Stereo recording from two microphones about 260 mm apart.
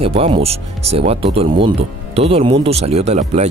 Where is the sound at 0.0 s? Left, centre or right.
Right.